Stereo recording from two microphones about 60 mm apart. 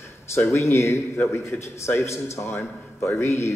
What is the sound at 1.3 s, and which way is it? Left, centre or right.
Speech, left.